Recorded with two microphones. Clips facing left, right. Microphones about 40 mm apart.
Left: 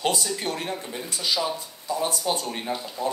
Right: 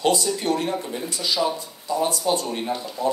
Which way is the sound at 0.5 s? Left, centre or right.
Centre.